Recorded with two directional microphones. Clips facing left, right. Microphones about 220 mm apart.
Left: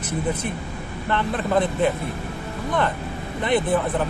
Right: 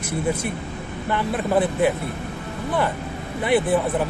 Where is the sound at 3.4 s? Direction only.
10° right (ahead or behind).